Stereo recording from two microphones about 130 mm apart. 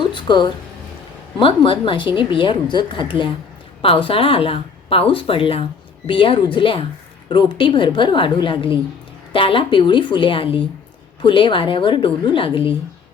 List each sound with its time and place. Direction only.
0.1 s speech: 35° left (ahead or behind)